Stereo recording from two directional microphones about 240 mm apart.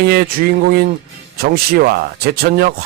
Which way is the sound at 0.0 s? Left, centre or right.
Right.